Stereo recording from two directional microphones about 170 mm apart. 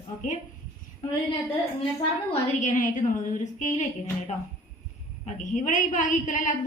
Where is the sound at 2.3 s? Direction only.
50° left (ahead or behind).